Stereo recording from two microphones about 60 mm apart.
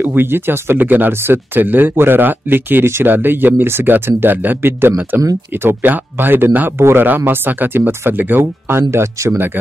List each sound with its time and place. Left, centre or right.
0.0 s speech: right
6.8 s speech: right
7.1 s speech: right